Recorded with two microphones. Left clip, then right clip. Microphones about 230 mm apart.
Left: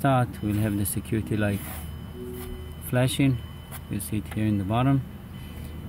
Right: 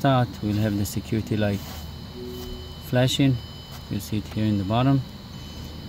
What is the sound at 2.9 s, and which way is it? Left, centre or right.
Speech, centre.